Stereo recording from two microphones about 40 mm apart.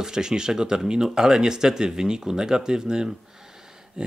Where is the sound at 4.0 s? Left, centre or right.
Centre.